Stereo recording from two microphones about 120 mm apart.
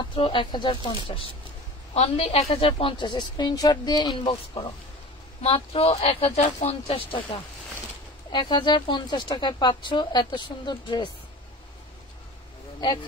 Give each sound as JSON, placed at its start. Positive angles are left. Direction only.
{"t": 0.0, "sound": "speech", "side_deg": 45}
{"t": 2.0, "sound": "speech", "side_deg": 60}
{"t": 5.4, "sound": "speech", "side_deg": 55}